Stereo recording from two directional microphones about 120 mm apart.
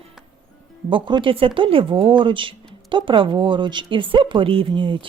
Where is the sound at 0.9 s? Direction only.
45° right (ahead or behind).